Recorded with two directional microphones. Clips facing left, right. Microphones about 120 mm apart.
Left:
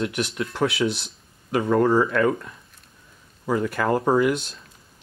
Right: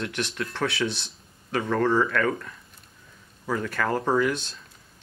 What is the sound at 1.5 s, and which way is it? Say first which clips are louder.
Speech: left 4 dB; 15° left (ahead or behind).